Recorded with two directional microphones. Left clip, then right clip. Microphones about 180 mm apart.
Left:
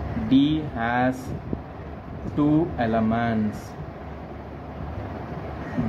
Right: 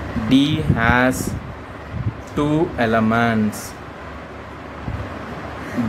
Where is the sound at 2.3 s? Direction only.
40° right (ahead or behind).